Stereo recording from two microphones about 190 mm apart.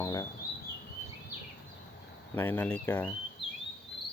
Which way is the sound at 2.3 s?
10° left (ahead or behind).